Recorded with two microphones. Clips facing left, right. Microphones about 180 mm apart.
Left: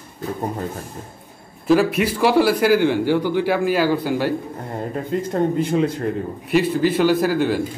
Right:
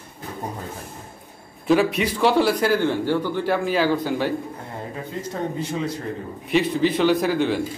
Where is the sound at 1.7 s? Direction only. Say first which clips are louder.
Left 2 dB; centre (ahead or behind).